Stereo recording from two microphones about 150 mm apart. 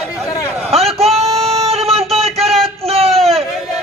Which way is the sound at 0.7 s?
40° right (ahead or behind).